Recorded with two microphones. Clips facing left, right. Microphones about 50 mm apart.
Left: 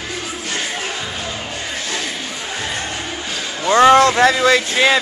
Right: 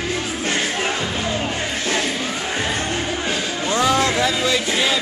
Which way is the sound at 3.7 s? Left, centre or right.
Left.